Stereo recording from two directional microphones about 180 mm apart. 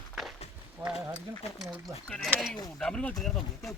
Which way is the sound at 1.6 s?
Centre (ahead or behind).